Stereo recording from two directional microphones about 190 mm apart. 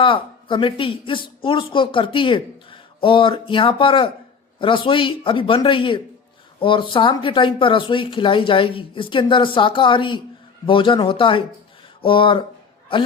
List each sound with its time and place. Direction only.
0.0 s speech: 25° left (ahead or behind)